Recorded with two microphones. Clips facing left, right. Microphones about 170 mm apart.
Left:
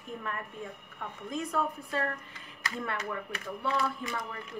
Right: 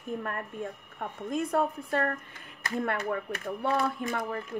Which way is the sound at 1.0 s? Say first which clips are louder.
Right 5 dB; 55° right (ahead or behind).